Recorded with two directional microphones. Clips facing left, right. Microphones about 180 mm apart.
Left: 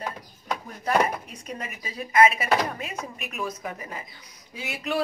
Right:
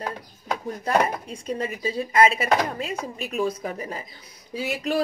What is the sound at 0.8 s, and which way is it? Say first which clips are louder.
Speech: right 1 dB; 30° right (ahead or behind).